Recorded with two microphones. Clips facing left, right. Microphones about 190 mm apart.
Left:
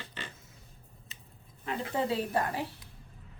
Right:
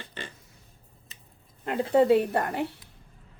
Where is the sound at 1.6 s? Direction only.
70° right (ahead or behind).